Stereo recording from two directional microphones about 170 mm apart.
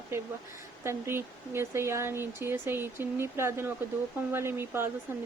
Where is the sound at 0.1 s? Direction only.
15° right (ahead or behind).